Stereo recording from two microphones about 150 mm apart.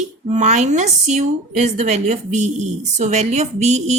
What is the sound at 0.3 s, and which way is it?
A woman's voice, 50° right (ahead or behind).